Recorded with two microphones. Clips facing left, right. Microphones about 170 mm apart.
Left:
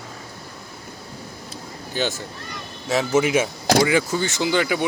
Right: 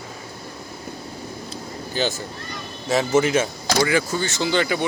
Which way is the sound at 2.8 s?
5° left (ahead or behind).